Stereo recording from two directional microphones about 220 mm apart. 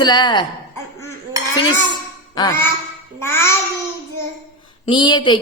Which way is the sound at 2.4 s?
15° left (ahead or behind).